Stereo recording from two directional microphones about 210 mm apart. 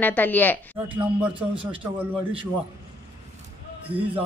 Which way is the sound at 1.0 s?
5° right (ahead or behind).